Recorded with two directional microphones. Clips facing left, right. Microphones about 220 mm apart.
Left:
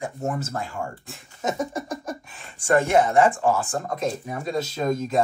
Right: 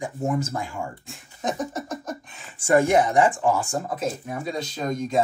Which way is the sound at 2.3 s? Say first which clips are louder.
Left 2 dB; centre (ahead or behind).